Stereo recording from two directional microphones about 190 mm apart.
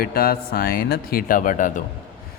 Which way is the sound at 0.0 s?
50° left (ahead or behind).